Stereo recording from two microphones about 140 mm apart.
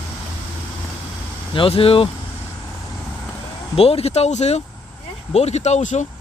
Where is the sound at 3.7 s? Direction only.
45° left (ahead or behind).